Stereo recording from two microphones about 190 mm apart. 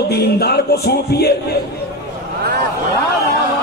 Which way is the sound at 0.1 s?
55° left (ahead or behind).